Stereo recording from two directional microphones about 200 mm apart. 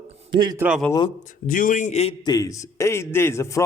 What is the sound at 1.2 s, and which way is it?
Speech, 40° left (ahead or behind).